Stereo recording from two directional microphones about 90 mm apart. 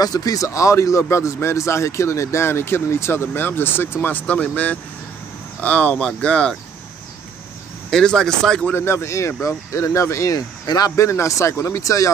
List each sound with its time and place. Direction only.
0.0 s speech: 45° left (ahead or behind); by 6.5 s 10° left (ahead or behind)
7.9 s speech: 5° left (ahead or behind)
8.7 s speech: 30° left (ahead or behind)